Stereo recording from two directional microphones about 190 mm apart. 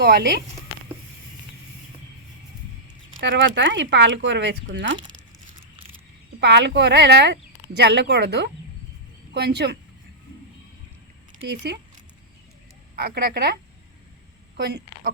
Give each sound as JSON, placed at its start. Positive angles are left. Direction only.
{"t": 0.0, "sound": "speech", "side_deg": -60}
{"t": 3.2, "sound": "speech", "side_deg": -75}
{"t": 6.4, "sound": "speech", "side_deg": -65}
{"t": 11.5, "sound": "speech", "side_deg": -60}
{"t": 13.0, "sound": "a woman's voice", "side_deg": -55}